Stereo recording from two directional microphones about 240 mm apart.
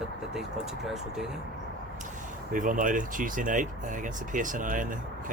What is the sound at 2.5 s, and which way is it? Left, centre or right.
Speech, right.